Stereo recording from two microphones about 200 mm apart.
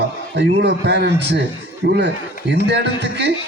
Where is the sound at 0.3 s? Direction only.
60° right (ahead or behind).